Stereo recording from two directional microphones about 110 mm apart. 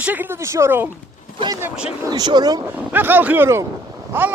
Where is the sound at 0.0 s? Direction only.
15° right (ahead or behind).